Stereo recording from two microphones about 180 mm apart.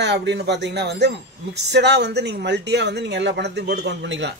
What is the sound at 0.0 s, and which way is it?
Speech, 70° right (ahead or behind).